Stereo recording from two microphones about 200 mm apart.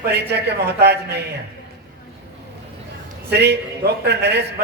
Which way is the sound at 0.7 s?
55° right (ahead or behind).